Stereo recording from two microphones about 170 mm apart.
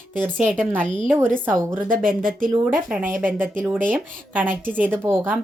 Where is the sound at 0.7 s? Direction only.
10° right (ahead or behind).